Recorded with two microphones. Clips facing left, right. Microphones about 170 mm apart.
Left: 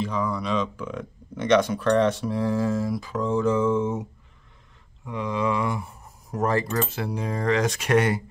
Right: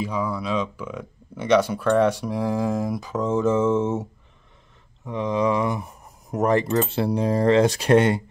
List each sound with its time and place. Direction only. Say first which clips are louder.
0.0 s speech: right 1 dB; 10° right (ahead or behind); by 8.2 s 25° right (ahead or behind)